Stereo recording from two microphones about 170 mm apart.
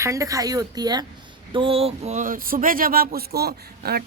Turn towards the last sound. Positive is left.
turn(degrees=-70)  # may be behind; listen again after turning